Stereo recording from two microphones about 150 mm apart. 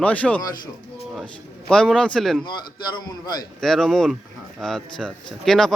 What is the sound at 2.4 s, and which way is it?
A man's voice, 30° left (ahead or behind).